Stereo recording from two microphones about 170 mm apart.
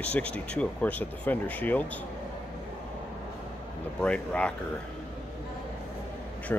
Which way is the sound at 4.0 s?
5° left (ahead or behind).